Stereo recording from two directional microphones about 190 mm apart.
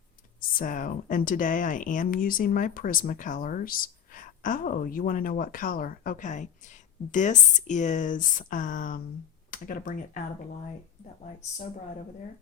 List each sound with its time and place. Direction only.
0.3 s speech: 45° left (ahead or behind)